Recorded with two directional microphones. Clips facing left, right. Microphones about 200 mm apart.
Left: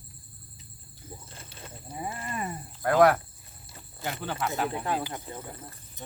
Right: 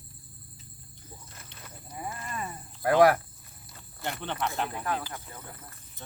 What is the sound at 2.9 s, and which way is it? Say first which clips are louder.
Speech: even; 5° right (ahead or behind).